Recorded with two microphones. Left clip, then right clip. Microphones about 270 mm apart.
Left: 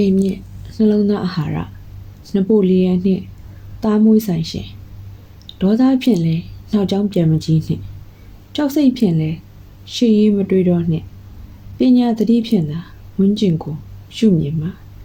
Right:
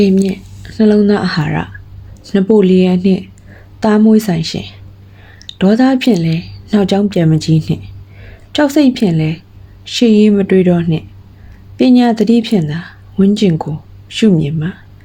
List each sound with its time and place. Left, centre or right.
0.0 s speech: right